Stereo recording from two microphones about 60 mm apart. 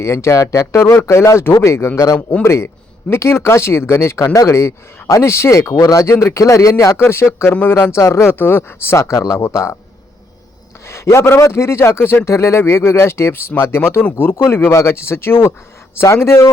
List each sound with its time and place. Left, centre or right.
0.0 s a man's voice: left
6.4 s a man's voice: left
8.4 s a man's voice: left
10.8 s a man's voice: left